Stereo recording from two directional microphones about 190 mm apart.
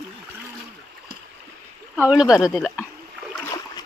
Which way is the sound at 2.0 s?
5° right (ahead or behind).